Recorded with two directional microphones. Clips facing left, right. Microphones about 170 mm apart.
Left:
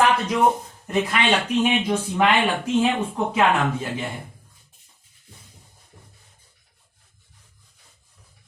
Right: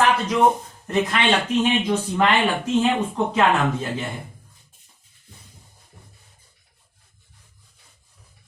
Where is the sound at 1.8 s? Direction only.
10° left (ahead or behind).